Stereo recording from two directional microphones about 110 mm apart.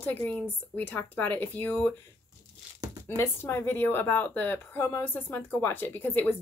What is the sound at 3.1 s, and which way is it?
A woman's voice, 20° left (ahead or behind).